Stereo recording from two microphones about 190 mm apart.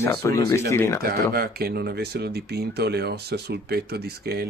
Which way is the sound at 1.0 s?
55° right (ahead or behind).